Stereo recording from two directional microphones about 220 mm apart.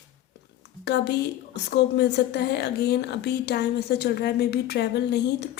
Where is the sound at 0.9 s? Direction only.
50° left (ahead or behind).